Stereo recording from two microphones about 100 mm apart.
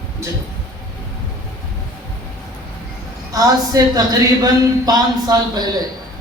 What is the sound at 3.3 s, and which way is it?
A woman's voice, 35° right (ahead or behind).